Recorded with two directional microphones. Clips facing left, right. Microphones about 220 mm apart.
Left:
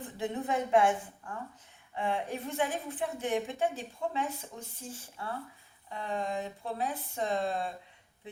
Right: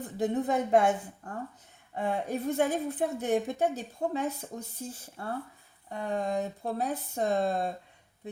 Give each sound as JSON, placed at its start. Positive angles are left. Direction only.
{"t": 0.2, "sound": "a woman's voice", "side_deg": -40}